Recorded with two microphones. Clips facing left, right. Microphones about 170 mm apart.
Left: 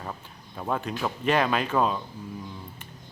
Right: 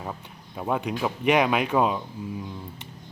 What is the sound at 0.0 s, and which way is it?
A man's voice, 10° right (ahead or behind).